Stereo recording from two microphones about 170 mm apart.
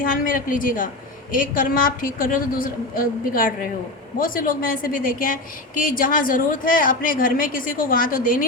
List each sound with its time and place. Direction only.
0.0 s a woman's voice: 55° left (ahead or behind)